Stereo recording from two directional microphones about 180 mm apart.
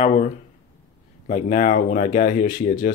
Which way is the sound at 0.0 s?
40° left (ahead or behind).